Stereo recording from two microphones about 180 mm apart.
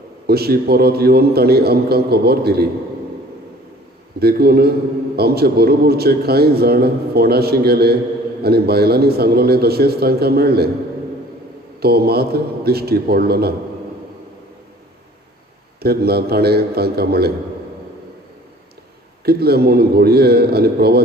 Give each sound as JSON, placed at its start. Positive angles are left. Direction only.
{"t": 0.3, "sound": "a man's voice", "side_deg": -60}
{"t": 4.2, "sound": "a man's voice", "side_deg": -60}
{"t": 11.8, "sound": "a man's voice", "side_deg": -60}
{"t": 15.8, "sound": "a man's voice", "side_deg": -60}
{"t": 19.2, "sound": "a man's voice", "side_deg": -60}